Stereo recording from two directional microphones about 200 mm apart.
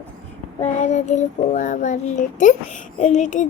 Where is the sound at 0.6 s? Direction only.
35° left (ahead or behind).